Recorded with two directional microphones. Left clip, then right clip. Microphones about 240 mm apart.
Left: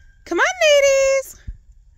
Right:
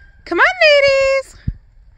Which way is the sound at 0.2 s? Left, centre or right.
Centre.